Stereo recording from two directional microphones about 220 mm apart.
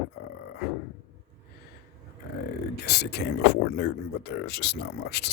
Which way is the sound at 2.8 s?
50° left (ahead or behind).